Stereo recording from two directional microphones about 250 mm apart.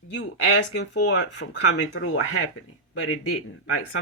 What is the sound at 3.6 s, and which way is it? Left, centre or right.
Speech, left.